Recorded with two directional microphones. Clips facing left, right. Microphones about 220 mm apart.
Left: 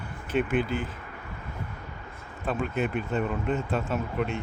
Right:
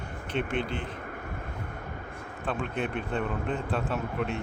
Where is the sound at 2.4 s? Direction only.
Centre (ahead or behind).